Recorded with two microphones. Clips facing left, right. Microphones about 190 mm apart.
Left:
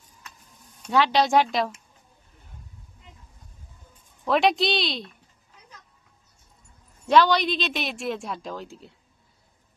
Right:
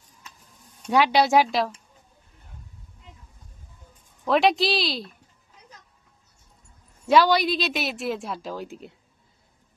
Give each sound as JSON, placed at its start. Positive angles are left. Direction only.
{"t": 0.9, "sound": "speech", "side_deg": -10}
{"t": 4.2, "sound": "a woman's voice", "side_deg": 0}
{"t": 7.1, "sound": "a woman's voice", "side_deg": -5}
{"t": 8.6, "sound": "speech", "side_deg": -20}